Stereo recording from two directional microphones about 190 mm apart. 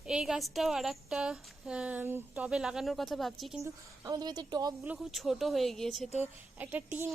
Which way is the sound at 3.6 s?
20° right (ahead or behind).